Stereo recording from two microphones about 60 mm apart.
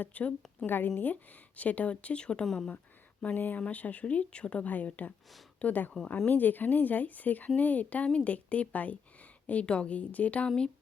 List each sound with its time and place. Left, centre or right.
0.0 s speech: left; by 2.6 s centre
3.3 s speech: left